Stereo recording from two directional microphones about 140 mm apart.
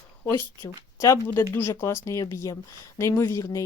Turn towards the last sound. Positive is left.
turn(degrees=25)  # may be behind; listen again after turning